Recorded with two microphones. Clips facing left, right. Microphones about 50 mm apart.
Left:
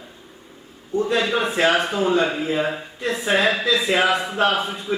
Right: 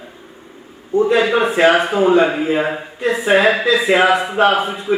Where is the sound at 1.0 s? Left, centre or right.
Centre.